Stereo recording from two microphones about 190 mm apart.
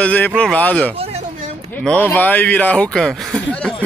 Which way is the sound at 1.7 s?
10° left (ahead or behind).